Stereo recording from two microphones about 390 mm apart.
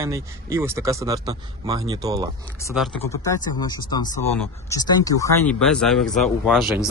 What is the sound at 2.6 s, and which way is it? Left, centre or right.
A man's voice, centre.